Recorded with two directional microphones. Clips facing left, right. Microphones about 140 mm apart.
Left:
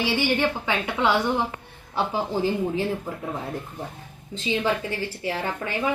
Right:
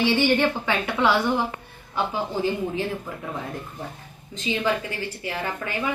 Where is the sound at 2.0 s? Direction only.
35° left (ahead or behind).